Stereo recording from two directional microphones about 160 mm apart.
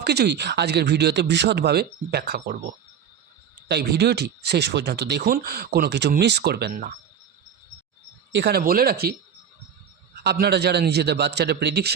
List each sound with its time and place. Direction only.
0.0 s speech: 90° right
3.7 s speech: 90° right; by 6.9 s 75° right (ahead or behind)
8.4 s speech: 80° right
10.2 s speech: 80° right